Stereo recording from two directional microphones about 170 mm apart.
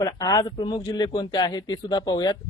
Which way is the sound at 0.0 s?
20° left (ahead or behind).